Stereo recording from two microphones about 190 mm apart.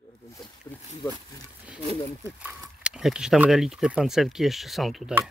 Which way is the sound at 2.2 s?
10° right (ahead or behind).